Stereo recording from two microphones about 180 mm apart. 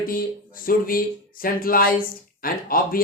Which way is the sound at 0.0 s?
50° left (ahead or behind).